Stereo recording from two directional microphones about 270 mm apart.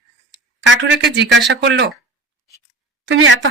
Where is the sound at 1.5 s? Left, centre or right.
Right.